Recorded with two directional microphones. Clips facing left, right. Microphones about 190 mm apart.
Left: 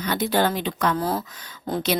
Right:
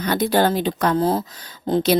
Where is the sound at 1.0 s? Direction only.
25° right (ahead or behind).